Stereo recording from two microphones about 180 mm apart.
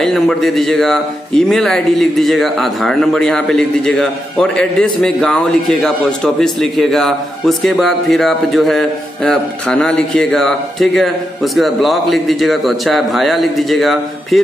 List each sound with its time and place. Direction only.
0.0 s a man's voice: centre (ahead or behind)